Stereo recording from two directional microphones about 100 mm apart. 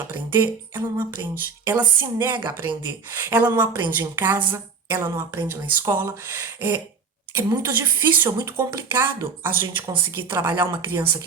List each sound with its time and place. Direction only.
0.1 s speech: 25° right (ahead or behind)